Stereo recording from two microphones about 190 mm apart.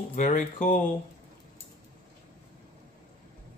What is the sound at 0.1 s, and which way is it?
Speech, 45° left (ahead or behind).